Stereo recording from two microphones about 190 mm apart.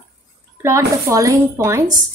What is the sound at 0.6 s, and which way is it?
A woman's voice, 15° right (ahead or behind).